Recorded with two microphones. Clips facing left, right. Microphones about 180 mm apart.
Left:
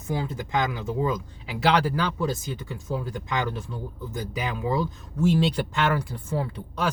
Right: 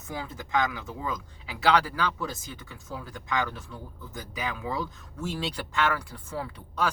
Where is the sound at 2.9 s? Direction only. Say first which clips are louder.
Left 3 dB; 25° left (ahead or behind).